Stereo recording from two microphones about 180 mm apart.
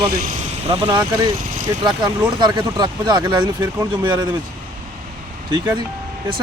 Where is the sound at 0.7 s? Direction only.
30° right (ahead or behind).